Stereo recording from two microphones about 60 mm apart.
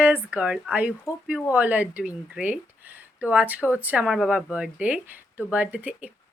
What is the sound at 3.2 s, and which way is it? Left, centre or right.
Speech, right.